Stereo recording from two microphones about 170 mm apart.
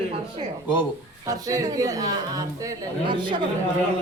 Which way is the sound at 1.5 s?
20° right (ahead or behind).